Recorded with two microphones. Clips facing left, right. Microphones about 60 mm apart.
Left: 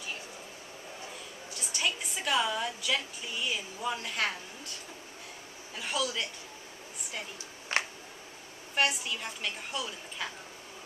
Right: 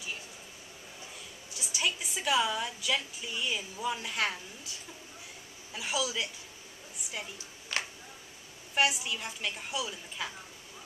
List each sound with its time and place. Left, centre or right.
1.5 s a woman's voice: centre
5.8 s a woman's voice: centre
7.7 s a sound: left
8.7 s a woman's voice: centre